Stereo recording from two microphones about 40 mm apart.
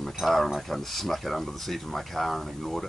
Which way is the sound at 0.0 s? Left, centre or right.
Centre.